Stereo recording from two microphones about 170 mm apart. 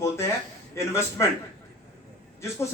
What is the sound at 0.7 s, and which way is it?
Speech, 15° left (ahead or behind).